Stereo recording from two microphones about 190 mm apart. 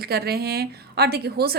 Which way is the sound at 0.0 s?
55° right (ahead or behind).